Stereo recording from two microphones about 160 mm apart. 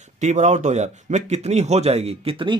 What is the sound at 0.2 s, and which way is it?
A man's voice, 45° right (ahead or behind).